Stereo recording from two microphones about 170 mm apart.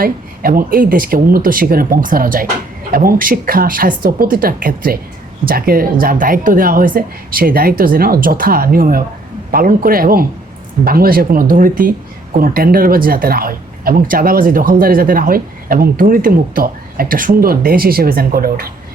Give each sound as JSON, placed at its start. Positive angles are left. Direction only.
{"t": 0.0, "sound": "speech", "side_deg": -60}